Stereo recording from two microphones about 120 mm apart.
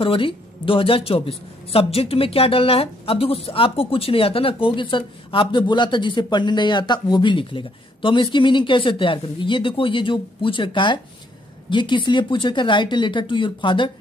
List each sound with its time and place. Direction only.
0.0 s a woman's voice: 45° left (ahead or behind)